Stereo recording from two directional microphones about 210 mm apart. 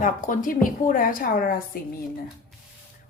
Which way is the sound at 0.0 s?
40° left (ahead or behind).